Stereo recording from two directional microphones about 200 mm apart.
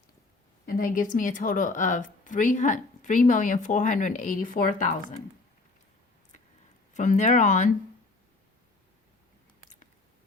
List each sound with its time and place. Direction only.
0.6 s a woman's voice: 45° left (ahead or behind)
6.9 s a woman's voice: 40° left (ahead or behind)